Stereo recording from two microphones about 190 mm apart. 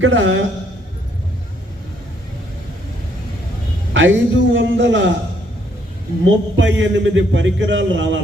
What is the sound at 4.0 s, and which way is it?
A man's voice, 75° right (ahead or behind).